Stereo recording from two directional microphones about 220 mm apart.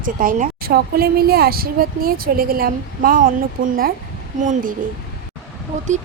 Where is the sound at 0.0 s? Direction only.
40° right (ahead or behind).